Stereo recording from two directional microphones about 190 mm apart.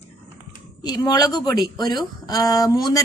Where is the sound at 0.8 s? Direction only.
20° left (ahead or behind).